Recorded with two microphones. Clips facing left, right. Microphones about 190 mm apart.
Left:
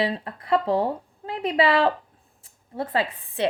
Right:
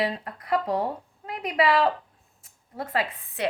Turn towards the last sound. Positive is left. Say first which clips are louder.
# left 3 dB
turn(degrees=30)  # may be behind; listen again after turning